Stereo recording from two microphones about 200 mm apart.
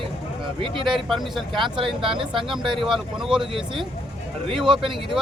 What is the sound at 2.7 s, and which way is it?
Speech, centre (ahead or behind).